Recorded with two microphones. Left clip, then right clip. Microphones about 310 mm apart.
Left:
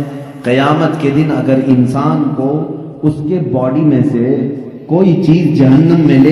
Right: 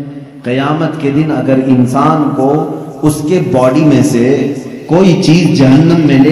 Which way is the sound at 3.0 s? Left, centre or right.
Right.